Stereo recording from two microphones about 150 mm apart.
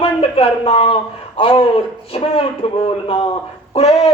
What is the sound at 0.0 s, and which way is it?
Speech, 40° left (ahead or behind).